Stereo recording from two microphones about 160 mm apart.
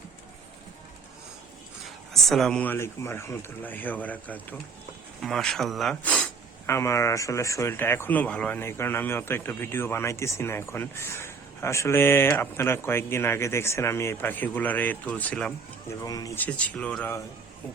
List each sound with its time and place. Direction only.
1.8 s speech: centre (ahead or behind)
6.7 s speech: 15° left (ahead or behind)
15.9 s speech: 20° left (ahead or behind)
16.5 s speech: 10° left (ahead or behind)